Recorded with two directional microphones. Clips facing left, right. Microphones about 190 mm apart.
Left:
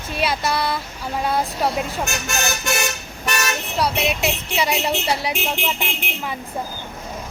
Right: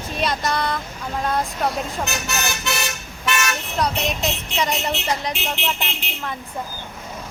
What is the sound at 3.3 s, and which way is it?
Toot, 40° left (ahead or behind).